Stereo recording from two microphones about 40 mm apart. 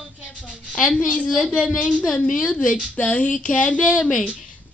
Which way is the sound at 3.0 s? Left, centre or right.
Left.